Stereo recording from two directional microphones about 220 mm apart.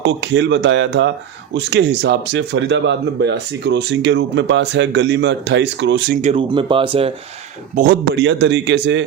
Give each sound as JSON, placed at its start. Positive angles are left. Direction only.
{"t": 0.0, "sound": "speech", "side_deg": -55}
{"t": 6.2, "sound": "speech", "side_deg": -25}
{"t": 7.8, "sound": "speech", "side_deg": -40}
{"t": 8.2, "sound": "speech", "side_deg": -55}